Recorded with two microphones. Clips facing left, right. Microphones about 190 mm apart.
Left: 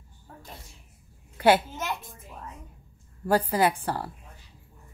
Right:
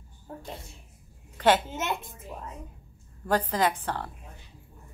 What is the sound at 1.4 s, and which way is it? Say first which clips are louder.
Speech: left 2 dB; 10° left (ahead or behind).